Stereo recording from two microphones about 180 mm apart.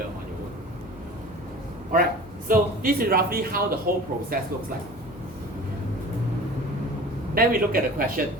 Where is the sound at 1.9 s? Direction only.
50° right (ahead or behind).